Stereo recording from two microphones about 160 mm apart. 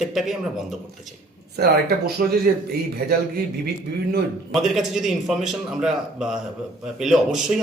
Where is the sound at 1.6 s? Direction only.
75° right (ahead or behind).